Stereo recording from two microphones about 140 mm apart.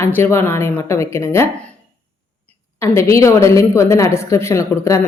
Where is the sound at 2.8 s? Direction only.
20° left (ahead or behind).